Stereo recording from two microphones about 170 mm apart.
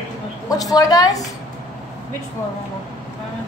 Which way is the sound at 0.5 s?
20° left (ahead or behind).